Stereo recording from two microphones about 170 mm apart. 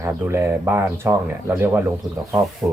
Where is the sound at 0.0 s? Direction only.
15° right (ahead or behind).